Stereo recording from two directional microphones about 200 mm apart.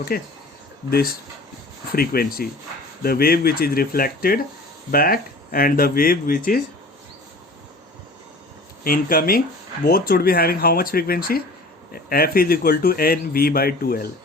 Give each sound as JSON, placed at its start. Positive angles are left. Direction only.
{"t": 0.1, "sound": "speech", "side_deg": 50}
{"t": 8.8, "sound": "speech", "side_deg": 45}